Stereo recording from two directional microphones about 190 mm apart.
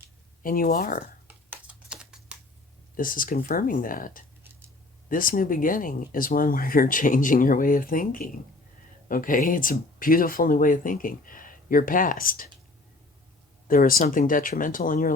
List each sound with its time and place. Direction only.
0.4 s speech: 50° left (ahead or behind)
1.3 s typing: 10° right (ahead or behind)
2.9 s speech: 45° left (ahead or behind)
13.7 s speech: 50° left (ahead or behind)